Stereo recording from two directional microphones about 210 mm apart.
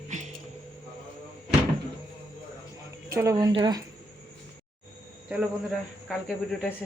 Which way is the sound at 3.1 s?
15° right (ahead or behind).